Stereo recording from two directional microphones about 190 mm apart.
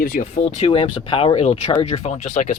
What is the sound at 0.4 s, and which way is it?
Speech, 30° left (ahead or behind).